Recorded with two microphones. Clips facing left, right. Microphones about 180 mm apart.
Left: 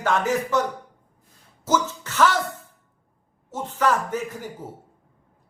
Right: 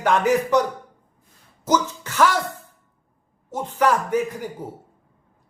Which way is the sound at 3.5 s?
10° right (ahead or behind).